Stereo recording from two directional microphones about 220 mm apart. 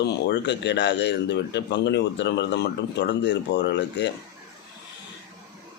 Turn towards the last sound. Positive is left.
turn(degrees=50)  # may be behind; listen again after turning